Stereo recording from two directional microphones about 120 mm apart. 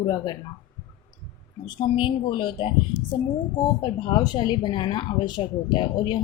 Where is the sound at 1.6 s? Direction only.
45° left (ahead or behind).